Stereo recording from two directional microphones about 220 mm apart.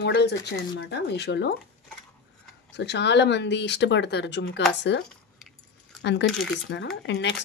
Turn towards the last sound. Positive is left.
turn(degrees=55)  # may be behind; listen again after turning